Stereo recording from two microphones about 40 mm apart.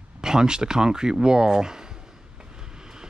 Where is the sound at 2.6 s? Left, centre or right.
Centre.